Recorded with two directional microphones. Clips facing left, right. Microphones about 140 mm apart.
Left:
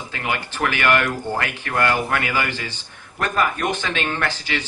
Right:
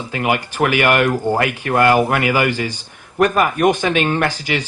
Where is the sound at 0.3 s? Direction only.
15° right (ahead or behind).